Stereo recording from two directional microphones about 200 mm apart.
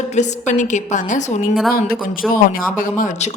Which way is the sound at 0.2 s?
40° left (ahead or behind).